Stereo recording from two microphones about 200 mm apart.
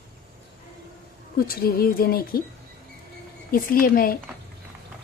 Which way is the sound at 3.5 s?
45° left (ahead or behind).